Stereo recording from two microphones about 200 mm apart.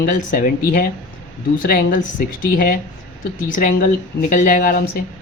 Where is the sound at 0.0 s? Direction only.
45° left (ahead or behind).